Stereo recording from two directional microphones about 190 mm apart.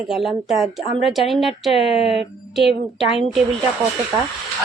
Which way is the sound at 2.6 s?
30° left (ahead or behind).